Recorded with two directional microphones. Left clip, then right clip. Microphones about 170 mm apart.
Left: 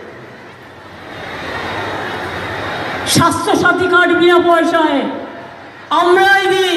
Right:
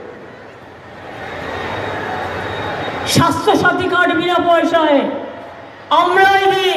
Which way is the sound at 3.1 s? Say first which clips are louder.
Even; 30° right (ahead or behind).